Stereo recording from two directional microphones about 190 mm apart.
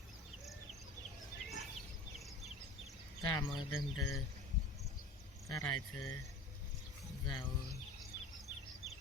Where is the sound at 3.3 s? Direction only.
25° left (ahead or behind).